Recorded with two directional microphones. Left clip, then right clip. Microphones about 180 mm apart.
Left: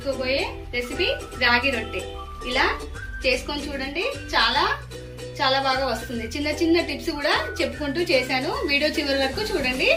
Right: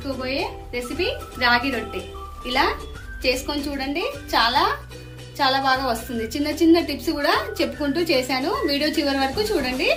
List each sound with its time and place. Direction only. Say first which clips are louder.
0.3 s a woman's voice: left 1 dB; 70° right (ahead or behind)